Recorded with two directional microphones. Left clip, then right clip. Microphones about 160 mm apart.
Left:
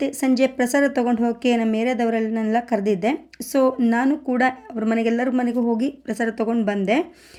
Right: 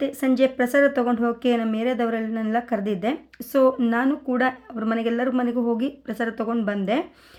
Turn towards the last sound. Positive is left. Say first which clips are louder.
# left 3 dB
turn(degrees=15)  # may be behind; listen again after turning